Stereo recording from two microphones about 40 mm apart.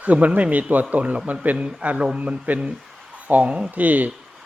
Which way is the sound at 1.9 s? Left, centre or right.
Right.